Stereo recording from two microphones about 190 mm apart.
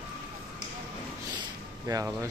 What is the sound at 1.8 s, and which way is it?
Speech, 15° right (ahead or behind).